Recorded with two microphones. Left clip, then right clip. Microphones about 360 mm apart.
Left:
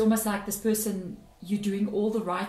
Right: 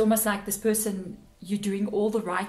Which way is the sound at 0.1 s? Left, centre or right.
Right.